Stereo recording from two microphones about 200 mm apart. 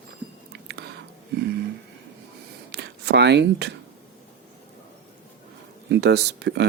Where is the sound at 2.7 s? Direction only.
55° right (ahead or behind).